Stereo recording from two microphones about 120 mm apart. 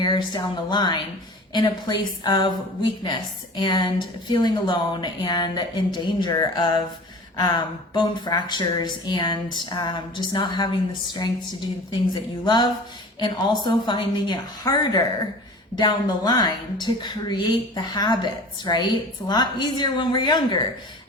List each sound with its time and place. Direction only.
0.0 s a woman's voice: 35° left (ahead or behind)
7.9 s a woman's voice: 35° left (ahead or behind)